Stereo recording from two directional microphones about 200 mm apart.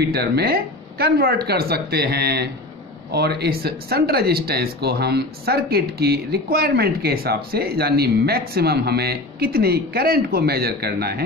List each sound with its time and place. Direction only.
0.0 s speech: 50° right (ahead or behind)